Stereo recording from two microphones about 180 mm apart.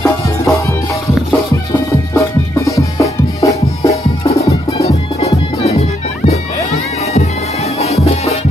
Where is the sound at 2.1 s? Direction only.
15° left (ahead or behind).